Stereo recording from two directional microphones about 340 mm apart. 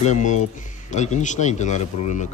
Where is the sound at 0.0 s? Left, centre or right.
Left.